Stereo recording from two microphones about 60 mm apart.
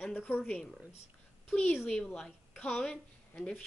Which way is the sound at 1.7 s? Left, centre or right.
Centre.